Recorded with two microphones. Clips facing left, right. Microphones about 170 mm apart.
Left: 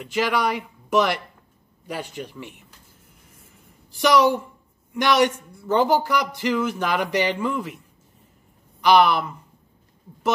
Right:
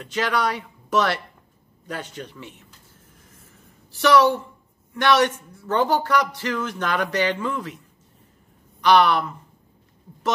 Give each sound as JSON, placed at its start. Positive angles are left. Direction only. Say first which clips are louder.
{"t": 0.0, "sound": "a man's voice", "louder": "left 1 dB", "side_deg": 10}
{"t": 3.9, "sound": "a man's voice", "louder": "right 1 dB", "side_deg": 15}
{"t": 8.8, "sound": "a man's voice", "louder": "even", "side_deg": 10}